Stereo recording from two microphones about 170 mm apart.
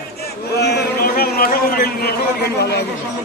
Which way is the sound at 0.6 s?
75° left (ahead or behind).